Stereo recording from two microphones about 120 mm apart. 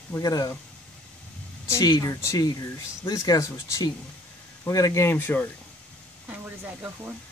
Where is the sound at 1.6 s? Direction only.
25° left (ahead or behind).